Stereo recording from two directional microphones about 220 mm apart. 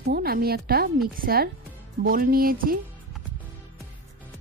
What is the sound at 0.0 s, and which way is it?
A woman's voice, 45° right (ahead or behind).